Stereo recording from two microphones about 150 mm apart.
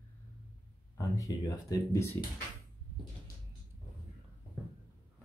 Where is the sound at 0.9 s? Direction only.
25° left (ahead or behind).